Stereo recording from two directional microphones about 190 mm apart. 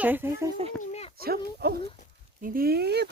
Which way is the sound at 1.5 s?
55° right (ahead or behind).